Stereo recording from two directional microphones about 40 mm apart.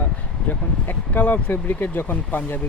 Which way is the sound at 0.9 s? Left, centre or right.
Left.